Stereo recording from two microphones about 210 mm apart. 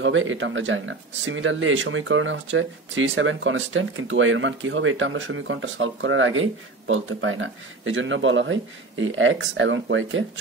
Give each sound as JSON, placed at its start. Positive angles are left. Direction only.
{"t": 0.0, "sound": "speech", "side_deg": -65}